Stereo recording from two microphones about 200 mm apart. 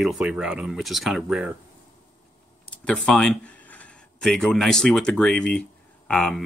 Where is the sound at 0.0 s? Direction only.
5° right (ahead or behind).